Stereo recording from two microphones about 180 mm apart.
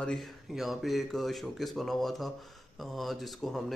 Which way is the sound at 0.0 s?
Centre (ahead or behind).